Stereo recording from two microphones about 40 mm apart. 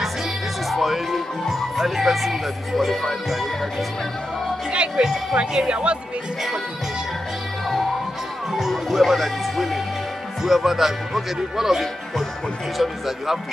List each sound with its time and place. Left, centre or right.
0.7 s music: centre
5.0 s speech: right
8.5 s music: centre
10.4 s a man's voice: centre